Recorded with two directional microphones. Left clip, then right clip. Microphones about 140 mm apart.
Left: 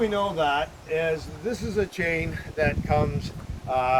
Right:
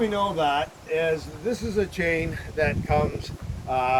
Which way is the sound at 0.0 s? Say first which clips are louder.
Even; 5° left (ahead or behind).